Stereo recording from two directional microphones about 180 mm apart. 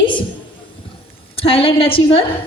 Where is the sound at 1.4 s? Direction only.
30° left (ahead or behind).